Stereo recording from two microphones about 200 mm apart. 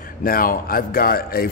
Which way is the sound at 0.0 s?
45° left (ahead or behind).